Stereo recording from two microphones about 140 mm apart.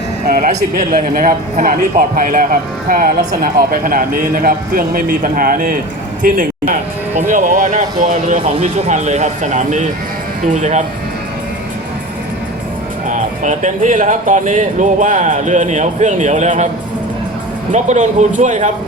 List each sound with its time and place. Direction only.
0.3 s speech: 80° right
6.2 s a man's voice: 75° right (ahead or behind)
7.3 s speech: 65° right (ahead or behind)
13.1 s speech: 60° right (ahead or behind)
17.7 s speech: 60° right (ahead or behind)